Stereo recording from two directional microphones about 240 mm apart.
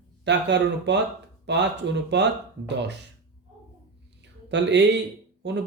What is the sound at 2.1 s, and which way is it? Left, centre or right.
Speech, right.